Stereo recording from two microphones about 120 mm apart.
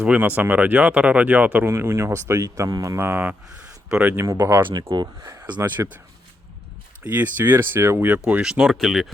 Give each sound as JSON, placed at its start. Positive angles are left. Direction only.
{"t": 0.0, "sound": "speech", "side_deg": -10}
{"t": 4.3, "sound": "speech", "side_deg": -30}
{"t": 7.0, "sound": "speech", "side_deg": -15}